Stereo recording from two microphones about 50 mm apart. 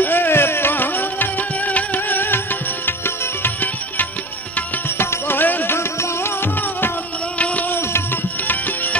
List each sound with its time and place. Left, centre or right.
0.0 s music: left
4.9 s music: left